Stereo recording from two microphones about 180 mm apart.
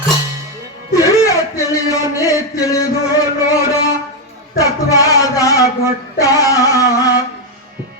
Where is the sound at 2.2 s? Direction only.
20° left (ahead or behind).